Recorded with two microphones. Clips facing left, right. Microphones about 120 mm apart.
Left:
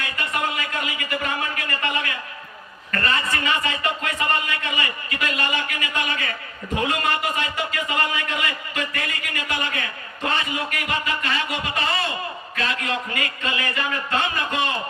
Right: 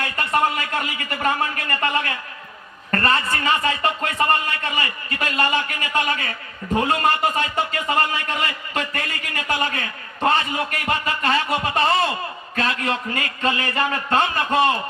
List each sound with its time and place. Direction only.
0.0 s a man's voice: 40° right (ahead or behind)